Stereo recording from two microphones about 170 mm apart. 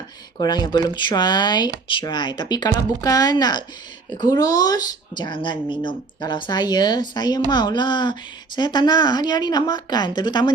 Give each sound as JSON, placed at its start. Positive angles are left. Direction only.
{"t": 0.3, "sound": "speech", "side_deg": 25}